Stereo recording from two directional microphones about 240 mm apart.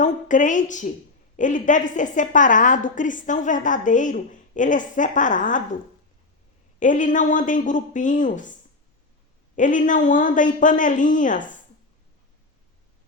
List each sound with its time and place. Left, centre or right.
0.0 s a woman's voice: left
6.7 s a woman's voice: left
9.6 s a woman's voice: left